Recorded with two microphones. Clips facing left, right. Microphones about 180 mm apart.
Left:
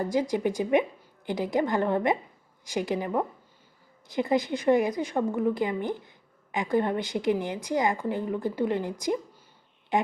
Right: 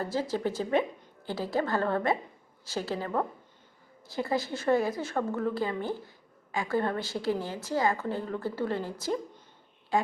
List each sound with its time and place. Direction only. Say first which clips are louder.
0.0 s a woman's voice: left 4 dB; 15° left (ahead or behind)